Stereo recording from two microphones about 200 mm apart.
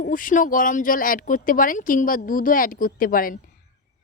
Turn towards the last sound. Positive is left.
turn(degrees=45)  # may be behind; listen again after turning